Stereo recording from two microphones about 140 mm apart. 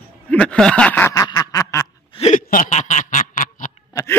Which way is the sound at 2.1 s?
45° left (ahead or behind).